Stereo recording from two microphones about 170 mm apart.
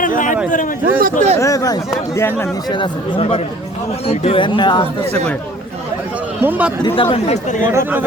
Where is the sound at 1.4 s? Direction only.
20° left (ahead or behind).